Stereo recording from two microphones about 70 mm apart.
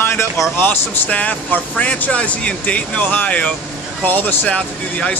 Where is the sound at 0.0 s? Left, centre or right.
Left.